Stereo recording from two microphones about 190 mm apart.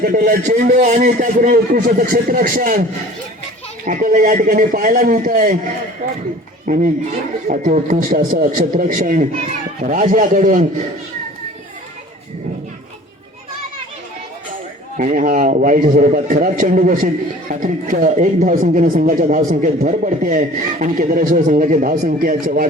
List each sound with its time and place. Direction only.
0.0 s speech: 50° right (ahead or behind)
3.8 s speech: 45° right (ahead or behind)
6.7 s speech: 45° right (ahead or behind)
14.9 s speech: 45° right (ahead or behind)